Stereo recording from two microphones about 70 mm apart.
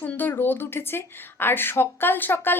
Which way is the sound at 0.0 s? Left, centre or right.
Left.